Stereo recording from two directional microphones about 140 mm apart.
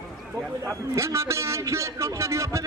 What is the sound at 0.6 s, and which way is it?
A man's voice, 20° right (ahead or behind).